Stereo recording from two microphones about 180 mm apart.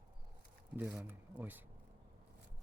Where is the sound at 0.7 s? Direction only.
10° right (ahead or behind).